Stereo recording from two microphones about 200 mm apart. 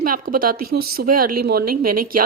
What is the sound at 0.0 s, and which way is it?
Speech, 45° right (ahead or behind).